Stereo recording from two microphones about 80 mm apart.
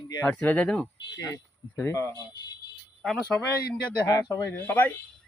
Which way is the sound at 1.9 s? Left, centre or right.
Left.